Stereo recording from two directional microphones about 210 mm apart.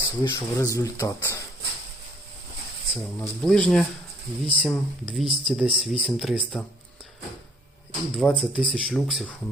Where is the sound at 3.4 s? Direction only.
5° left (ahead or behind).